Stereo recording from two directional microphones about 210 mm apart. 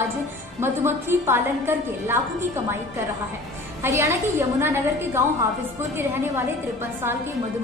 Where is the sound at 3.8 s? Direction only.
15° right (ahead or behind).